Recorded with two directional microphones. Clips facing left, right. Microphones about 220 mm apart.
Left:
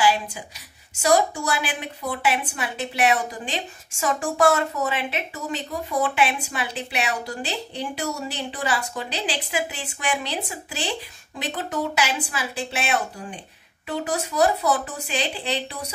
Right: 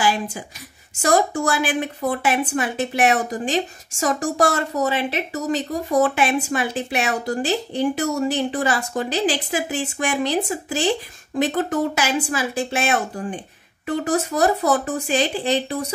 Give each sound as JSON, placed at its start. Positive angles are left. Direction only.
{"t": 0.0, "sound": "a woman's voice", "side_deg": -45}